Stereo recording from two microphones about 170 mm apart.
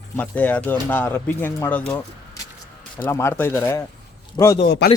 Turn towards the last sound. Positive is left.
turn(degrees=70)  # may be behind; listen again after turning